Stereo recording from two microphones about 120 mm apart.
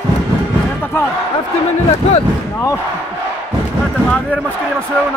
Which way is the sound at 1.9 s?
60° left (ahead or behind).